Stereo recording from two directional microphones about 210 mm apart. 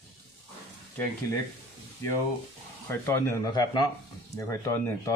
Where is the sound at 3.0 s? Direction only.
15° left (ahead or behind).